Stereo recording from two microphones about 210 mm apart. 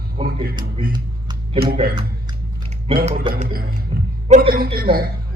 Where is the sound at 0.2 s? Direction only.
45° right (ahead or behind).